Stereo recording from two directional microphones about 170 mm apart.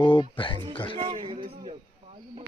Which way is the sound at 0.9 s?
30° right (ahead or behind).